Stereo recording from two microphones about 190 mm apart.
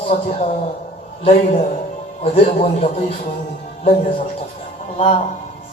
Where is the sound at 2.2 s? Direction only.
30° left (ahead or behind).